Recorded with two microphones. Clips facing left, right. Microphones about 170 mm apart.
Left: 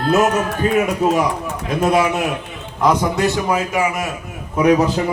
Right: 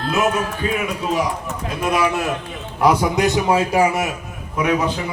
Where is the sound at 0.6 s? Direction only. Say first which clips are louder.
Left 6 dB; 45° left (ahead or behind).